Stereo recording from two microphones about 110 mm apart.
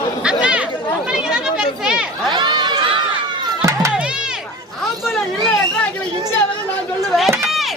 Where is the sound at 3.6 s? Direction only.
25° right (ahead or behind).